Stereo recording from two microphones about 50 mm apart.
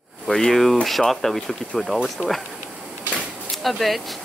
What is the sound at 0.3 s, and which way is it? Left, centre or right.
Speech, centre.